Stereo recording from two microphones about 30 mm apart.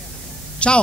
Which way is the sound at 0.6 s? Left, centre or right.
Left.